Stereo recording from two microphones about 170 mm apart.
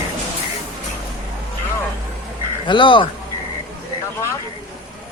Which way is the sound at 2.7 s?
30° left (ahead or behind).